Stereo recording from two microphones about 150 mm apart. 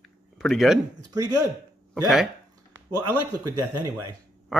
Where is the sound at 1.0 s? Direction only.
25° right (ahead or behind).